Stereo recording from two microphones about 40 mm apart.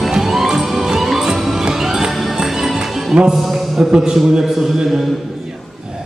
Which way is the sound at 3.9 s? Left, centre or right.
Centre.